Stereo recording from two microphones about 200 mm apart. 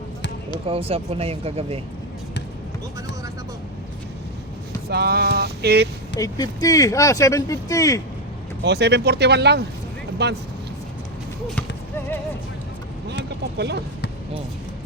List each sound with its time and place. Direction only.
0.7 s speech: 30° right (ahead or behind)
4.9 s a sound: 55° right (ahead or behind)
6.1 s speech: 20° left (ahead or behind)
8.6 s speech: 55° right (ahead or behind)
11.9 s speech: 10° left (ahead or behind)
13.6 s speech: 55° right (ahead or behind)